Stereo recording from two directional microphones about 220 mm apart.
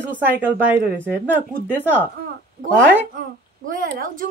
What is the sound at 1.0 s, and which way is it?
Speech, 10° right (ahead or behind).